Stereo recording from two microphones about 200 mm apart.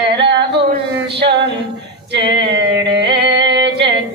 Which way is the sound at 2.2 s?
25° right (ahead or behind).